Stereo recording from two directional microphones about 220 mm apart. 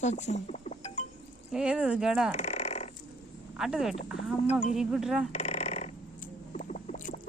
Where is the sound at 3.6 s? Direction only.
Centre (ahead or behind).